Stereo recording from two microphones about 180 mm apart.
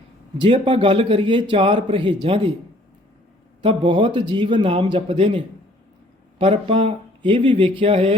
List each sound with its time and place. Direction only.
0.3 s a man's voice: 30° right (ahead or behind)
3.6 s a man's voice: 30° right (ahead or behind)
6.4 s speech: 30° right (ahead or behind)